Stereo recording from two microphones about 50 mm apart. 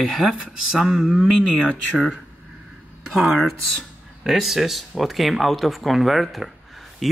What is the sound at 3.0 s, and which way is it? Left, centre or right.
Speech, centre.